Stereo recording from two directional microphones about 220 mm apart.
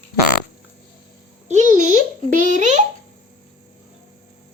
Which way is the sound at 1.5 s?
35° right (ahead or behind).